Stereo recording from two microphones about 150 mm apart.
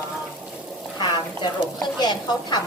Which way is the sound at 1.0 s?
30° left (ahead or behind).